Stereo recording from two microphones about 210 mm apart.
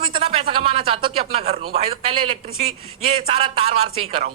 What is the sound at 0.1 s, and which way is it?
A man's voice, 25° right (ahead or behind).